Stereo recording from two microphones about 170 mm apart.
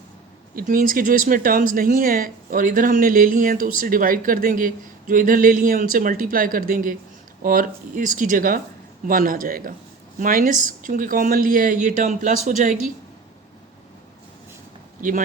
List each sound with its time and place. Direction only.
0.5 s speech: 55° right (ahead or behind)